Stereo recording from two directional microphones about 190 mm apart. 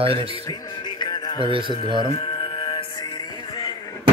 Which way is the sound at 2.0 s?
30° left (ahead or behind).